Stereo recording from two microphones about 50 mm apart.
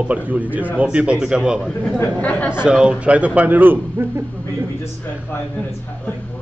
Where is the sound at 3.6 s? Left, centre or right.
Right.